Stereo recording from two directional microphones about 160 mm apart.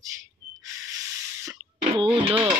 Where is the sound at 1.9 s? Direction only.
35° right (ahead or behind).